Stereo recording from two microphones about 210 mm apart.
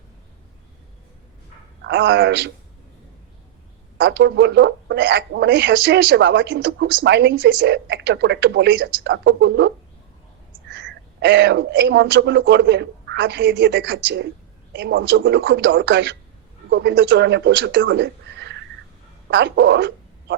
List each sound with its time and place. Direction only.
1.8 s a man's voice: 60° right (ahead or behind)
3.9 s speech: 60° right (ahead or behind)